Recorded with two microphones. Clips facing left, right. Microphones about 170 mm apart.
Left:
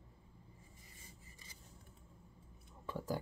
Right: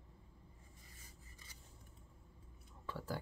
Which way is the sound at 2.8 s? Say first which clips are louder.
Left 4 dB; 15° left (ahead or behind).